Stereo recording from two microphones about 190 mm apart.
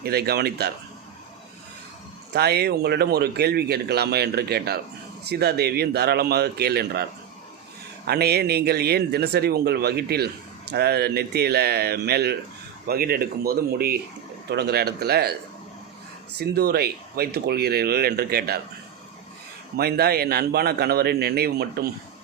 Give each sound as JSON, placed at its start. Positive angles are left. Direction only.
{"t": 0.0, "sound": "speech", "side_deg": -55}
{"t": 2.3, "sound": "speech", "side_deg": -55}
{"t": 16.4, "sound": "speech", "side_deg": -55}
{"t": 19.7, "sound": "speech", "side_deg": -55}